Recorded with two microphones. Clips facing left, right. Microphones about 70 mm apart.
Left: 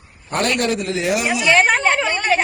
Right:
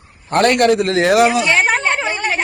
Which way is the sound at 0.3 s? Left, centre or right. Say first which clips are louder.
Right 7 dB; right.